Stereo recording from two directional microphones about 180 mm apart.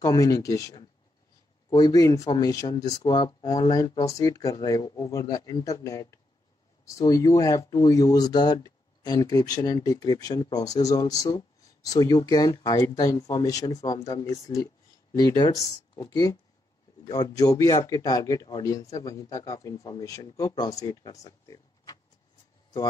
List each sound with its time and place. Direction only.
0.0 s speech: 20° left (ahead or behind)